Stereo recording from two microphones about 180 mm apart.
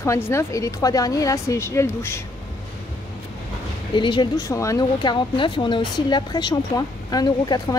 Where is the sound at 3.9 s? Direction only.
25° left (ahead or behind).